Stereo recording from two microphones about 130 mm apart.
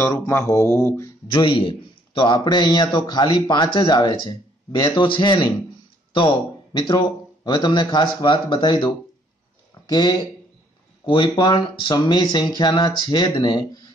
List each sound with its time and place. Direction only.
0.0 s speech: 25° left (ahead or behind)
1.2 s a man's voice: 40° left (ahead or behind)